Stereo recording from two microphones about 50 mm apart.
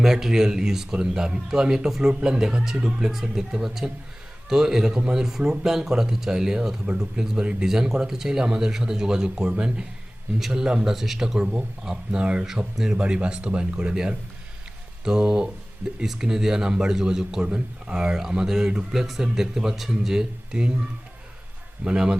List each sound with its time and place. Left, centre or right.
0.0 s speech: centre
12.5 s speech: centre
21.8 s speech: centre